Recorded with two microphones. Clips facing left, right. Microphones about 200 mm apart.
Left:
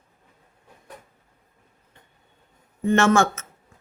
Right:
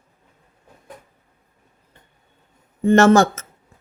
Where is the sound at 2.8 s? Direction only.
40° right (ahead or behind).